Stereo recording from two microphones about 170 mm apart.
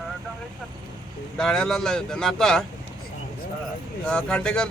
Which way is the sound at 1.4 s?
5° left (ahead or behind).